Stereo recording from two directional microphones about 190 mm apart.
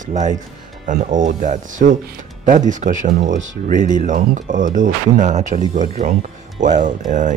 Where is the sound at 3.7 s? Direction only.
40° right (ahead or behind).